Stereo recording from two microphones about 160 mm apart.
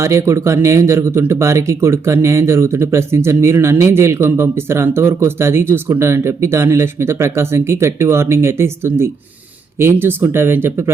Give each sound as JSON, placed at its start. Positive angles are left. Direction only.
{"t": 0.0, "sound": "speech", "side_deg": -20}